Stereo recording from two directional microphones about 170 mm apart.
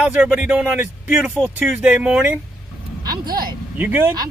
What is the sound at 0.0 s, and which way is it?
Speech, 5° right (ahead or behind).